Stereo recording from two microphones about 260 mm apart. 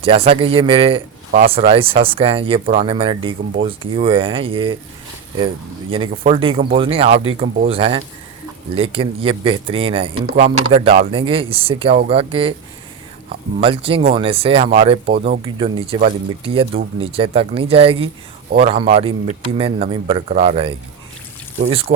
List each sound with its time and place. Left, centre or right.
0.0 s speech: right
5.9 s speech: right
13.6 s speech: right